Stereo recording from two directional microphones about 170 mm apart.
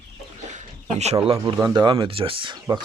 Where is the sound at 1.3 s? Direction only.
20° right (ahead or behind).